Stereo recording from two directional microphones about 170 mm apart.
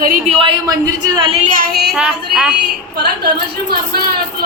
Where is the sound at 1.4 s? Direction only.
55° right (ahead or behind).